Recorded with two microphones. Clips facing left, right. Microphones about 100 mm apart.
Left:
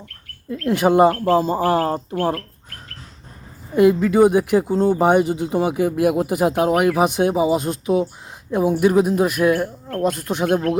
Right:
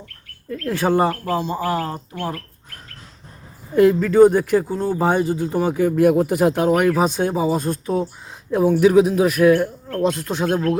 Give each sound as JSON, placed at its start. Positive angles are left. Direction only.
{"t": 0.5, "sound": "speech", "side_deg": 15}
{"t": 1.4, "sound": "speech", "side_deg": 45}
{"t": 3.8, "sound": "speech", "side_deg": 10}
{"t": 8.8, "sound": "speech", "side_deg": 0}